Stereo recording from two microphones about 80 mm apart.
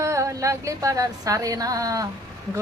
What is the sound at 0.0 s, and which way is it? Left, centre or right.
Speech, right.